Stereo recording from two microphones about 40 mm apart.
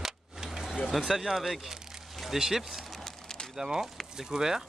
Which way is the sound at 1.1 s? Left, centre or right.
Centre.